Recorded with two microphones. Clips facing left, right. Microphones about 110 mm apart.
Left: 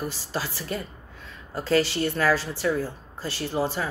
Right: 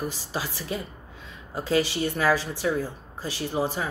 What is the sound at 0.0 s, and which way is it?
A woman's voice, 15° right (ahead or behind).